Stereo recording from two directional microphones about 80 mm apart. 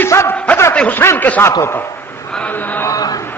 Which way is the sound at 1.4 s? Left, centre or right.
Left.